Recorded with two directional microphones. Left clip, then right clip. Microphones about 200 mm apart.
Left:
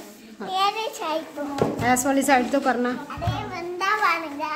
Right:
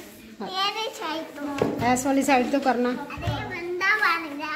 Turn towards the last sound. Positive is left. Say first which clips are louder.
# left 1 dB
turn(degrees=25)  # may be behind; listen again after turning